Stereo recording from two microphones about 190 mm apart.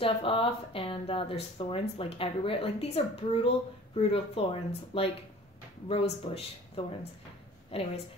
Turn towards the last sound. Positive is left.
turn(degrees=30)  # may be behind; listen again after turning